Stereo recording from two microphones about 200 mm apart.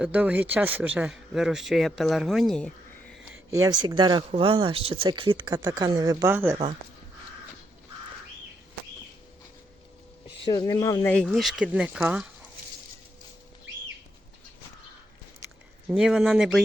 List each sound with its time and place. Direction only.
0.0 s speech: 5° right (ahead or behind)
3.3 s speech: 15° right (ahead or behind)
10.4 s speech: 20° left (ahead or behind)
11.1 s speech: 5° left (ahead or behind)
15.9 s speech: 5° right (ahead or behind)